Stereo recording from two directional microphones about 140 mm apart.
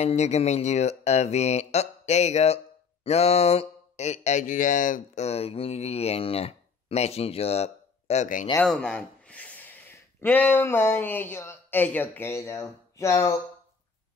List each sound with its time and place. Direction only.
0.0 s speech: 50° left (ahead or behind)
8.6 s speech: 5° left (ahead or behind)